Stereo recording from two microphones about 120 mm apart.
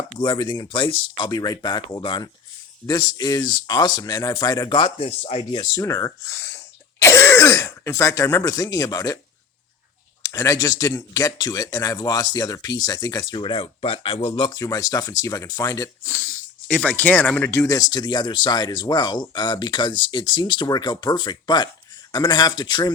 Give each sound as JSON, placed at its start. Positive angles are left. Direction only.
{"t": 0.2, "sound": "speech", "side_deg": 40}
{"t": 4.8, "sound": "speech", "side_deg": 55}
{"t": 5.5, "sound": "speech", "side_deg": 40}
{"t": 5.8, "sound": "speech", "side_deg": 30}
{"t": 10.2, "sound": "speech", "side_deg": 25}
{"t": 14.3, "sound": "speech", "side_deg": 35}
{"t": 16.6, "sound": "speech", "side_deg": 10}